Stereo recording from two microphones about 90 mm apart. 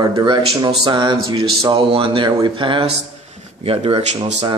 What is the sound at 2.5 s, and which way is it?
Speech, 70° right (ahead or behind).